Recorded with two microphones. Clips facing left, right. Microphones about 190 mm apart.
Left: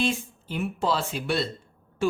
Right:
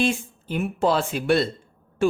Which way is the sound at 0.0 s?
50° right (ahead or behind).